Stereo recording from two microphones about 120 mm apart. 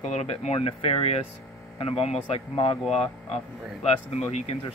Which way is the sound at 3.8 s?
65° left (ahead or behind).